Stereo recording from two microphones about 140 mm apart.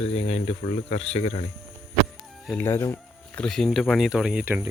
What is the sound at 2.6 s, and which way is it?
Music, 15° left (ahead or behind).